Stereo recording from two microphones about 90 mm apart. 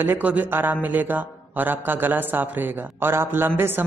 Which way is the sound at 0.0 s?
20° right (ahead or behind).